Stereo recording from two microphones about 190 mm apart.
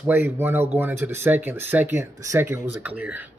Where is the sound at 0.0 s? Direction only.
10° right (ahead or behind).